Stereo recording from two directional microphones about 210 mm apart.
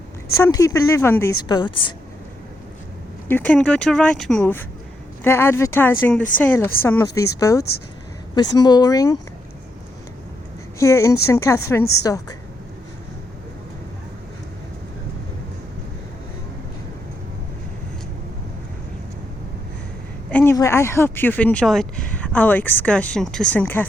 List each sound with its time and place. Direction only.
0.3 s speech: 15° left (ahead or behind)
3.2 s speech: 10° left (ahead or behind)
10.8 s speech: 15° left (ahead or behind)
20.3 s speech: 10° left (ahead or behind)